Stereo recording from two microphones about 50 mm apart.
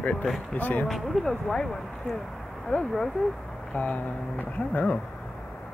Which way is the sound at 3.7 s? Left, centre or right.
Left.